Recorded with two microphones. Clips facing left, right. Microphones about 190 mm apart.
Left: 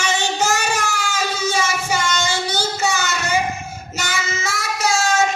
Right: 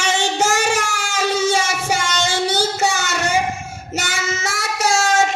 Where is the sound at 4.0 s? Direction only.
80° right.